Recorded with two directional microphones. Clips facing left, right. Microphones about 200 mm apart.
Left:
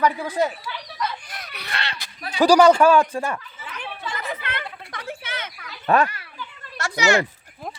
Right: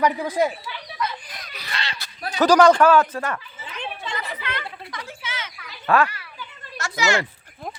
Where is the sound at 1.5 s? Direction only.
60° left (ahead or behind).